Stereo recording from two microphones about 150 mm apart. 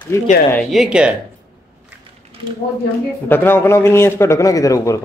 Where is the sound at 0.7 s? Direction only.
5° right (ahead or behind).